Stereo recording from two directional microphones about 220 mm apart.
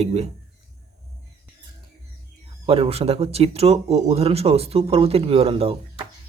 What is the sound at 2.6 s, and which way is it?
Speech, 25° right (ahead or behind).